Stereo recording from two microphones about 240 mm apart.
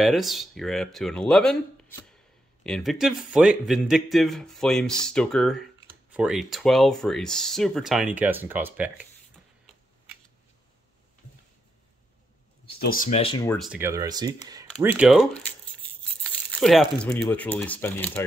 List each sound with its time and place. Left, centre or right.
0.0 s speech: centre
12.7 s speech: left
13.5 s speech: centre
16.5 s speech: centre